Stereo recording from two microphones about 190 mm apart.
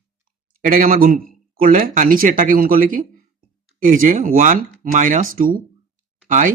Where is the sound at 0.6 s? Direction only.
45° right (ahead or behind).